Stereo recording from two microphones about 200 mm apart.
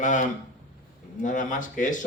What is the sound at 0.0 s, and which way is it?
Speech, 40° left (ahead or behind).